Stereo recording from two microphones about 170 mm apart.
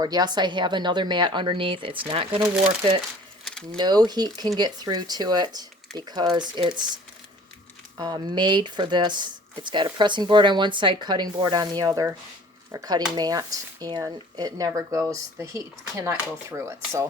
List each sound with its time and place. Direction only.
0.0 s speech: 25° right (ahead or behind)
3.4 s a sound: 5° left (ahead or behind)
3.8 s speech: 25° right (ahead or behind)
7.9 s speech: 25° right (ahead or behind)